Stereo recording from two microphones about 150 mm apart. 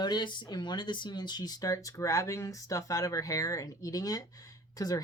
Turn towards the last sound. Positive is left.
turn(degrees=25)  # may be behind; listen again after turning